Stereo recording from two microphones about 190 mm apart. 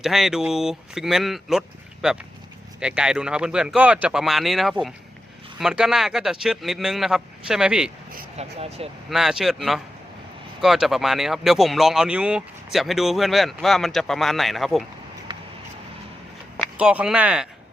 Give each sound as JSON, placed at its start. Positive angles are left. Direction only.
{"t": 0.0, "sound": "speech", "side_deg": 0}
{"t": 8.4, "sound": "speech", "side_deg": -35}
{"t": 9.0, "sound": "speech", "side_deg": 0}
{"t": 15.3, "sound": "a sound", "side_deg": -25}
{"t": 16.6, "sound": "speech", "side_deg": -5}